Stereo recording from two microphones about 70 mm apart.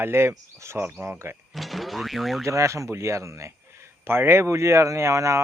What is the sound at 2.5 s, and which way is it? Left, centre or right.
A man's voice, right.